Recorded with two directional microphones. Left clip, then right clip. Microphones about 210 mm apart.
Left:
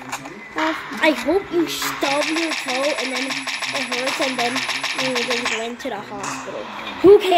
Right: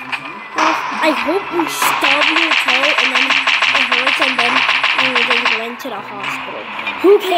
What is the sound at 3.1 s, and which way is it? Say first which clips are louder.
Speech: right 11 dB; 15° right (ahead or behind).